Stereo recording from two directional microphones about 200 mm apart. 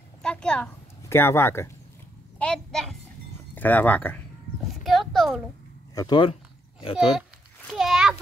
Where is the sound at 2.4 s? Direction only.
5° left (ahead or behind).